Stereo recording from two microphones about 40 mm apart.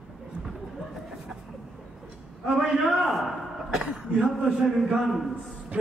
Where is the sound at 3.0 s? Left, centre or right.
Centre.